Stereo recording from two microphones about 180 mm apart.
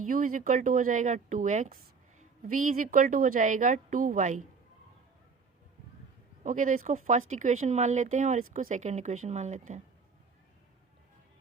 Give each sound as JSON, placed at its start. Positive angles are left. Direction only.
{"t": 0.0, "sound": "speech", "side_deg": -50}
{"t": 6.4, "sound": "speech", "side_deg": -45}